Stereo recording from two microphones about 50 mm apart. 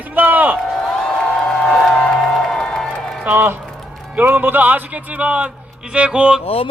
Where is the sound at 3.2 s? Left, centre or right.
Right.